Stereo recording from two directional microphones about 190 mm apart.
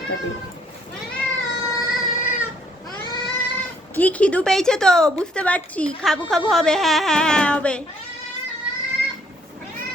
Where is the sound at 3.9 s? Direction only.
10° left (ahead or behind).